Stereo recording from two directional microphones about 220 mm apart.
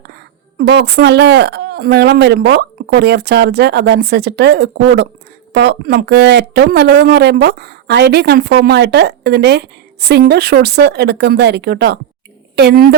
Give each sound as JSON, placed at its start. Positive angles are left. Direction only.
{"t": 0.6, "sound": "a woman's voice", "side_deg": -50}